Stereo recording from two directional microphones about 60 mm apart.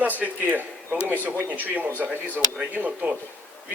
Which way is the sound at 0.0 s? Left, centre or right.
Right.